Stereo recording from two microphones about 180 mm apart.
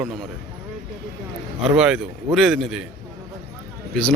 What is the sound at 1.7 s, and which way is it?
Speech, 5° right (ahead or behind).